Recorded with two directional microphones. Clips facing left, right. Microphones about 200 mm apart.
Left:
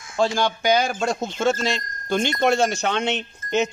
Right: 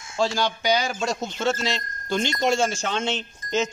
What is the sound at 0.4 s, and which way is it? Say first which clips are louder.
Speech: left 3 dB; 50° left (ahead or behind).